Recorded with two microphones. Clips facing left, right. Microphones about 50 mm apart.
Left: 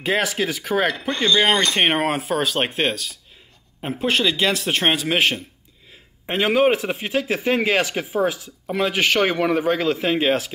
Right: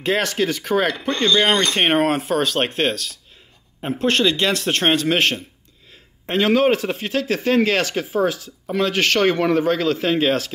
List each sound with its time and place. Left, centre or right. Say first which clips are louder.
0.0 s speech: right 1 dB; centre